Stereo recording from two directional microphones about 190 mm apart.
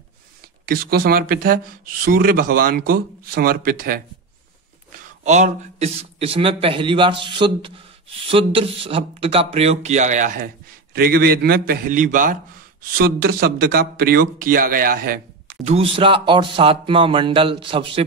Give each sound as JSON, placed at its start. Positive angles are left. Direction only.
{"t": 0.7, "sound": "speech", "side_deg": -50}
{"t": 4.9, "sound": "a man's voice", "side_deg": -40}
{"t": 15.6, "sound": "speech", "side_deg": -30}